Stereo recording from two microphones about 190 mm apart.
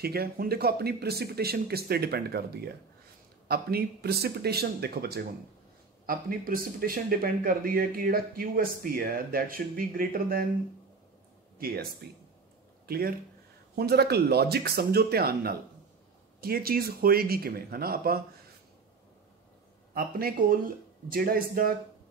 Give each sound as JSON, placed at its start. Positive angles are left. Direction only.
{"t": 0.0, "sound": "speech", "side_deg": -55}
{"t": 3.4, "sound": "a man's voice", "side_deg": -55}
{"t": 11.5, "sound": "a man's voice", "side_deg": -55}
{"t": 19.9, "sound": "a man's voice", "side_deg": -50}